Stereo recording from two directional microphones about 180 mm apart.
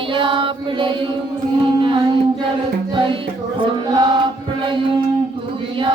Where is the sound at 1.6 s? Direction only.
30° right (ahead or behind).